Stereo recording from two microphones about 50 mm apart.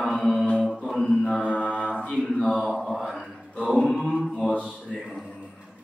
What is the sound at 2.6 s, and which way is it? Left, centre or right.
Mantra, centre.